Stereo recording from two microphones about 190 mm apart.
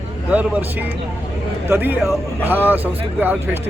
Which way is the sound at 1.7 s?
10° right (ahead or behind).